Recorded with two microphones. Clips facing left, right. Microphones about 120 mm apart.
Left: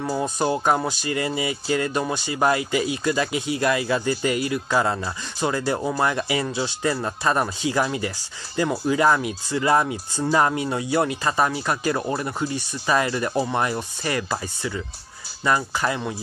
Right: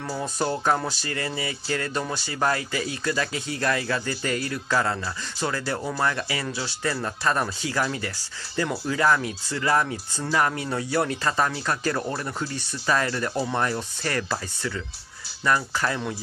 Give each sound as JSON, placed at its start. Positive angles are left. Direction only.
{"t": 0.0, "sound": "speech", "side_deg": 15}